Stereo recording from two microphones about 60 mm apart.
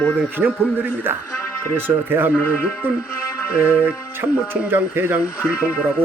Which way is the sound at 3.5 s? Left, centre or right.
Right.